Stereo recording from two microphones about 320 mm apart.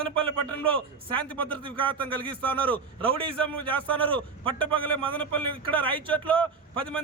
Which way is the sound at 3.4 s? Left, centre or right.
Centre.